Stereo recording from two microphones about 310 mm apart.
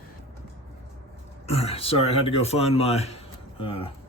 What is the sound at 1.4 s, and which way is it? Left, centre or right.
Speech, centre.